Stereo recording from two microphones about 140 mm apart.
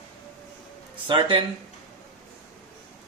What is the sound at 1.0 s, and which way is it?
Speech, 35° right (ahead or behind).